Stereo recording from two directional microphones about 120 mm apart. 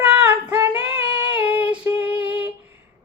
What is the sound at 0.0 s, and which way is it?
Female singing, 15° right (ahead or behind).